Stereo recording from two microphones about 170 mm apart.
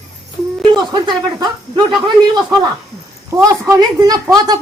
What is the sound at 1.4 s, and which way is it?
Speech, 30° right (ahead or behind).